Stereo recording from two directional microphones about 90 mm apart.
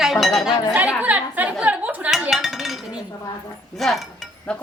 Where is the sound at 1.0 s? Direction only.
15° right (ahead or behind).